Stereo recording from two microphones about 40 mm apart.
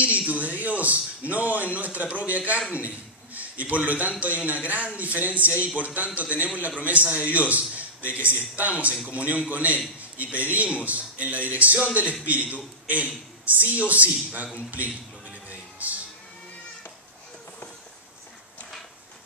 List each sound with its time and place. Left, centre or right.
0.0 s a man's voice: right
15.8 s music: right